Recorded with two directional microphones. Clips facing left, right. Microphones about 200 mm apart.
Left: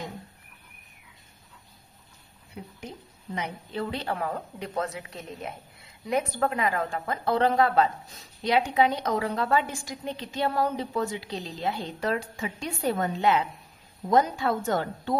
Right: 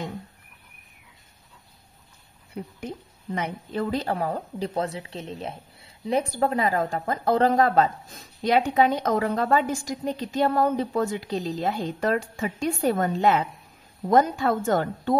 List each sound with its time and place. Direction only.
3.3 s a woman's voice: 45° right (ahead or behind)